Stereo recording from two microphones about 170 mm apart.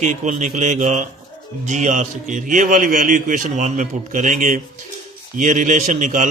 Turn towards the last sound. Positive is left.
turn(degrees=-50)  # may be behind; listen again after turning